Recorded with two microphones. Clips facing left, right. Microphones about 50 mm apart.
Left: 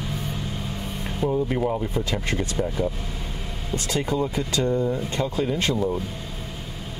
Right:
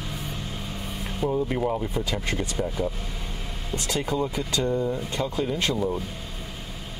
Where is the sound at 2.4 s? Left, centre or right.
Centre.